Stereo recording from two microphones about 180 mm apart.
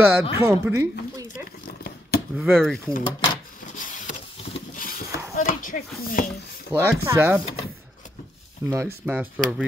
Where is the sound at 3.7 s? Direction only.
45° left (ahead or behind).